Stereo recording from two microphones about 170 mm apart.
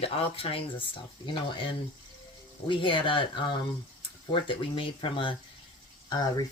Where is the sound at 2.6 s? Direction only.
30° left (ahead or behind).